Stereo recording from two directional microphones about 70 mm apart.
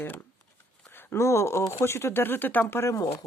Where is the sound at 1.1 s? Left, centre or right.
Left.